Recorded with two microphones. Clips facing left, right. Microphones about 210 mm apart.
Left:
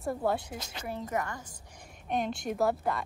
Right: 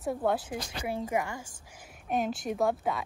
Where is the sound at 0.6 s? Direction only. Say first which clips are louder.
Right 5 dB; 20° left (ahead or behind).